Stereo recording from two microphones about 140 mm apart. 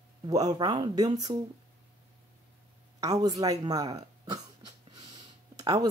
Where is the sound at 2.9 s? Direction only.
25° right (ahead or behind).